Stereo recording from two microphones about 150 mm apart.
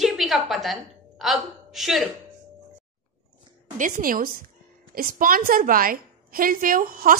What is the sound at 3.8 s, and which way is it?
A woman's voice, 65° right (ahead or behind).